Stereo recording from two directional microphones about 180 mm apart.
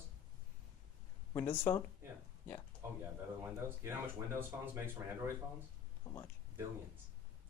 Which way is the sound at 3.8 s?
15° right (ahead or behind).